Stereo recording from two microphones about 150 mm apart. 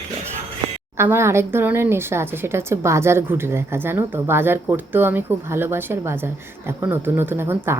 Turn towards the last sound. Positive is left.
turn(degrees=-15)  # may be behind; listen again after turning